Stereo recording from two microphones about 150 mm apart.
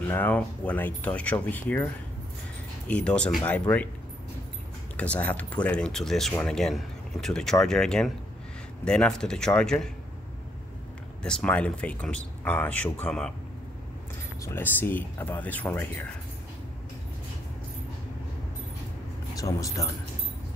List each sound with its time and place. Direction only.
0.1 s speech: 10° left (ahead or behind)
2.9 s speech: 5° left (ahead or behind)
4.9 s speech: 10° left (ahead or behind)
11.2 s speech: 5° left (ahead or behind)
14.4 s speech: 15° left (ahead or behind)
19.3 s speech: 20° left (ahead or behind)